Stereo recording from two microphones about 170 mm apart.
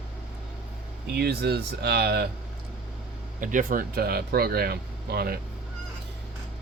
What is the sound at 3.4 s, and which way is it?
Speech, 50° right (ahead or behind).